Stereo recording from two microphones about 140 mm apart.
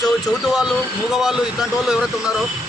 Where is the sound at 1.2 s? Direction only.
5° right (ahead or behind).